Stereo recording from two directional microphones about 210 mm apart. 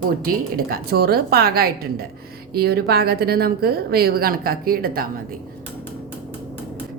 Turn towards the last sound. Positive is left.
turn(degrees=-45)  # may be behind; listen again after turning